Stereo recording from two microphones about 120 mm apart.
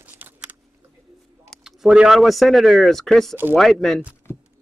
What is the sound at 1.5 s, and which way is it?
Speech, 5° right (ahead or behind).